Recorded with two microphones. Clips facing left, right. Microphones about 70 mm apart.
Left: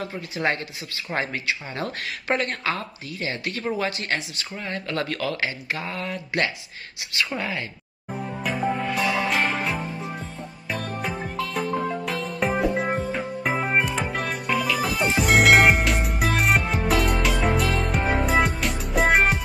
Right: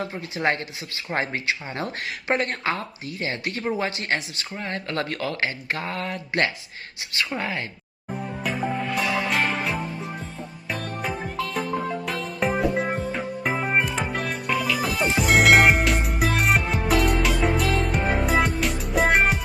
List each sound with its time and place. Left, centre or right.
0.0 s speech: right
8.1 s music: centre